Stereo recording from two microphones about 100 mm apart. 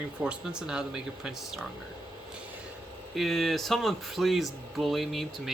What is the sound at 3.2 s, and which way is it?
Speech, centre (ahead or behind).